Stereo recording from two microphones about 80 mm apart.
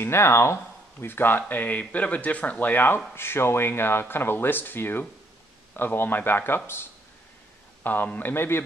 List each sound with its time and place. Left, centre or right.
0.0 s speech: left